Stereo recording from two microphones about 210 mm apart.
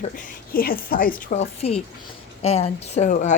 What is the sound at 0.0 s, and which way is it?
A woman's voice, 40° left (ahead or behind).